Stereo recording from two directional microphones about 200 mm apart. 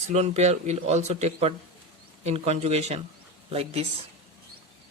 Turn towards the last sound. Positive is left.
turn(degrees=-30)  # may be behind; listen again after turning